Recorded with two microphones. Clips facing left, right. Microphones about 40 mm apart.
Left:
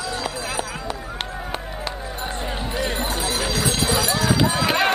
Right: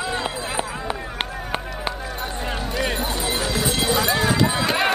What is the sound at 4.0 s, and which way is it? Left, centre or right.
Run, right.